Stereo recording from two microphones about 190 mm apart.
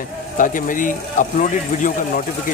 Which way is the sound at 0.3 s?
45° left (ahead or behind).